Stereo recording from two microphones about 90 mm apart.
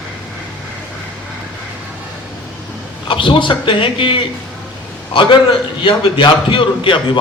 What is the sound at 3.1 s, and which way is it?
A man's voice, 70° left (ahead or behind).